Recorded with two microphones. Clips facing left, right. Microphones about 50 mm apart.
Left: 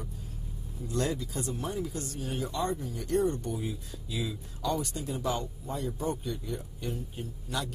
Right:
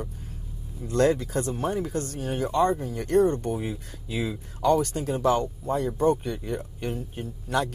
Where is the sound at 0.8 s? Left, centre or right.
Right.